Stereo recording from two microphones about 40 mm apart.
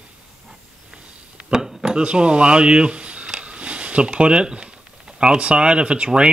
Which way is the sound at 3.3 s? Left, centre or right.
Right.